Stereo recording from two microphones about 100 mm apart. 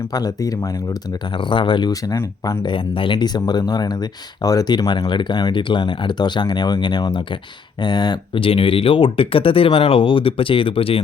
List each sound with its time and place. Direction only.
0.1 s speech: 40° left (ahead or behind)
1.5 s speech: 50° left (ahead or behind)
1.9 s speech: 30° left (ahead or behind)
2.6 s speech: 55° left (ahead or behind)
8.4 s speech: 65° left (ahead or behind)